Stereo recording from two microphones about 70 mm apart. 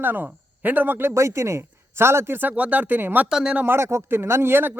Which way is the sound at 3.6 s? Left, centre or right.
Right.